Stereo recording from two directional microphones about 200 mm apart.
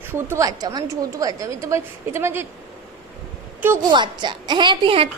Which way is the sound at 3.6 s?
15° right (ahead or behind).